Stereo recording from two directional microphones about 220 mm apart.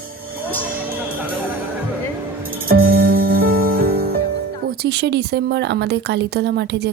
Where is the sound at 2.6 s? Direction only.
40° right (ahead or behind).